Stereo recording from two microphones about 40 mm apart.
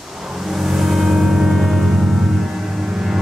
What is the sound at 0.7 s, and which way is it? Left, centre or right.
Music, centre.